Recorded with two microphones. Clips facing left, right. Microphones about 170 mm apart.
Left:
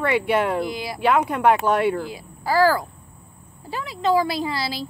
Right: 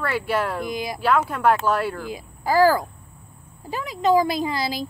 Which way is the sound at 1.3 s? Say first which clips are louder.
Left 2 dB; 15° left (ahead or behind).